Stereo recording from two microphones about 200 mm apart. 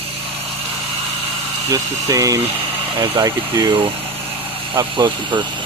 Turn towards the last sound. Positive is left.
turn(degrees=-20)  # may be behind; listen again after turning